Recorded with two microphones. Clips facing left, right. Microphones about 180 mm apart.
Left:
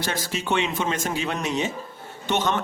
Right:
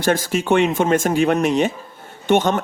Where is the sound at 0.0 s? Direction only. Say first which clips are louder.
Right 9 dB; 50° right (ahead or behind).